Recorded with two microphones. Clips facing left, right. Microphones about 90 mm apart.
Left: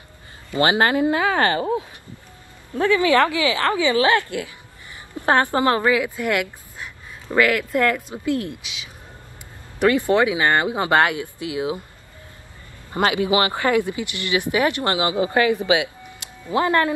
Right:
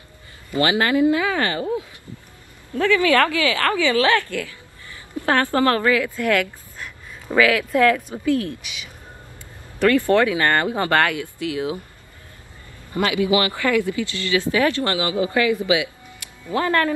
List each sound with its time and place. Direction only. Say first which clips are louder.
0.6 s speech: even; 30° left (ahead or behind)
2.7 s speech: even; 20° left (ahead or behind)
7.2 s speech: right 1 dB; centre (ahead or behind)
8.1 s speech: right 2 dB; 15° left (ahead or behind)
12.9 s speech: even; 25° left (ahead or behind)